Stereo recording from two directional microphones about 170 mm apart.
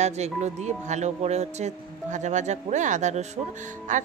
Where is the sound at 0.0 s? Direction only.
40° right (ahead or behind).